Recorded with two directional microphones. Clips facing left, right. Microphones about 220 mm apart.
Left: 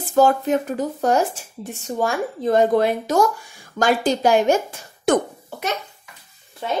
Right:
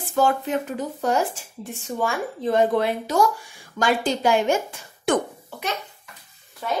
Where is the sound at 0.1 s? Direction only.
40° left (ahead or behind).